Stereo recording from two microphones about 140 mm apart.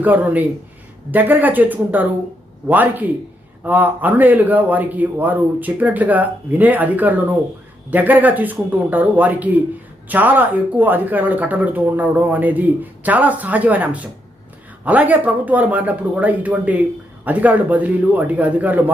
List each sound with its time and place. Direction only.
0.0 s speech: 10° right (ahead or behind)